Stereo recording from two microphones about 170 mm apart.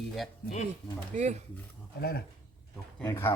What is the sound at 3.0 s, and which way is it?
Speech, 15° left (ahead or behind).